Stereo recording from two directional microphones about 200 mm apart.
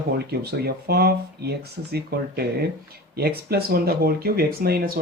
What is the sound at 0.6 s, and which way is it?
Speech, 50° right (ahead or behind).